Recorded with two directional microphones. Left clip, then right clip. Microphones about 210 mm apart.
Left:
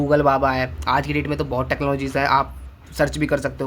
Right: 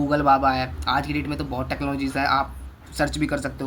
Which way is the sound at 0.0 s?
40° left (ahead or behind).